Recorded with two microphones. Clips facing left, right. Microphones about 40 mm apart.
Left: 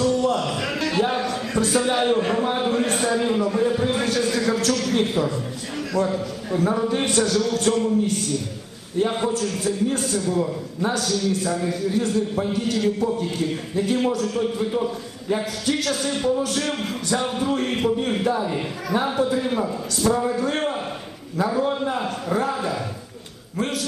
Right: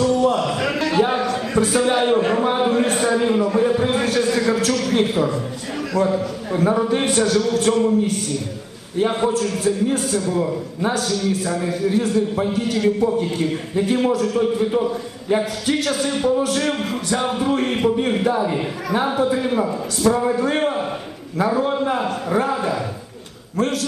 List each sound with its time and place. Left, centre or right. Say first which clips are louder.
0.0 s a sound: right 3 dB; centre
3.6 s a man's voice: right 3 dB; centre
9.2 s a man's voice: right 4 dB; centre
10.4 s a man's voice: right 3 dB; right
10.9 s a man's voice: right 1 dB; centre
23.6 s a man's voice: right 5 dB; centre